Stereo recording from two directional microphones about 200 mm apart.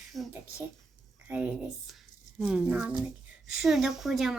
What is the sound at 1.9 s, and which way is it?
Speech, centre (ahead or behind).